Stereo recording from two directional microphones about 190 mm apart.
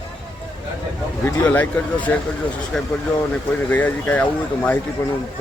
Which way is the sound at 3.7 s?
10° left (ahead or behind).